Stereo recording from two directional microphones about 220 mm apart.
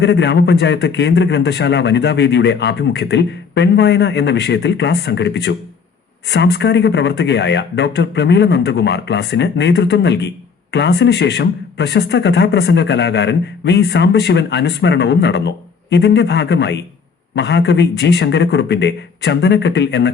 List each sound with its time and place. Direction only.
0.0 s speech: 50° left (ahead or behind)